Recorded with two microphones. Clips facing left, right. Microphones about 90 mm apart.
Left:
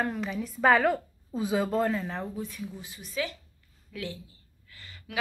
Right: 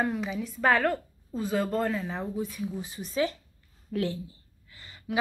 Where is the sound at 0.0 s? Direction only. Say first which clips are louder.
Right 1 dB; 5° right (ahead or behind); by 4.2 s 35° right (ahead or behind).